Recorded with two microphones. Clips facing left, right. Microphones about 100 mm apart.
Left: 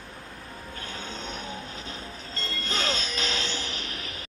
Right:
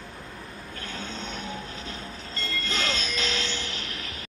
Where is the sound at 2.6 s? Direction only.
25° left (ahead or behind).